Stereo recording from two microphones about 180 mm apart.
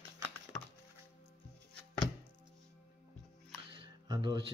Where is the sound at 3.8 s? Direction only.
25° right (ahead or behind).